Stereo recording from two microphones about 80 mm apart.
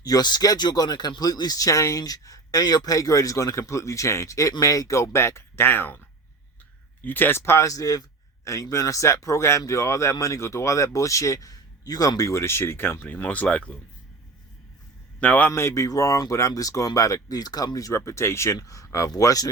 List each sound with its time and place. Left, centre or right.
0.0 s speech: left
7.0 s speech: left
15.2 s a man's voice: left
15.5 s speech: left